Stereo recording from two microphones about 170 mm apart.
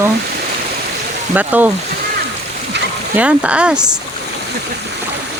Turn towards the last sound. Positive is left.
turn(degrees=-5)  # may be behind; listen again after turning